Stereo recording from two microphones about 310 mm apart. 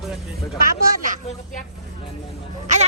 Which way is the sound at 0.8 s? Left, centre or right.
Right.